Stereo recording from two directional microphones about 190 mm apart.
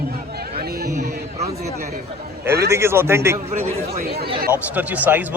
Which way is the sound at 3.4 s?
30° right (ahead or behind).